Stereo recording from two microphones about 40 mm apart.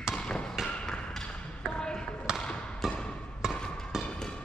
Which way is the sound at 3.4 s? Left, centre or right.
Centre.